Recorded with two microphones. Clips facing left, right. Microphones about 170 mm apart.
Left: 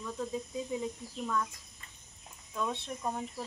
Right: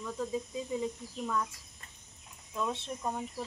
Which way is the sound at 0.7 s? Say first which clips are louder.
Right 4 dB; centre (ahead or behind).